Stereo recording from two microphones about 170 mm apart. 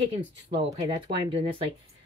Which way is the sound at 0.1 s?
35° right (ahead or behind).